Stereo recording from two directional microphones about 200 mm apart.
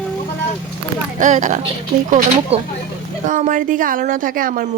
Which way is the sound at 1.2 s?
40° right (ahead or behind).